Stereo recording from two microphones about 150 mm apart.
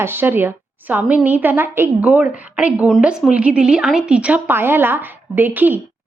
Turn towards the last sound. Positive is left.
turn(degrees=-10)  # may be behind; listen again after turning